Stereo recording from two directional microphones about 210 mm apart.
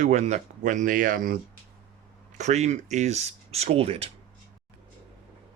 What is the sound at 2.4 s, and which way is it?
Speech, 35° right (ahead or behind).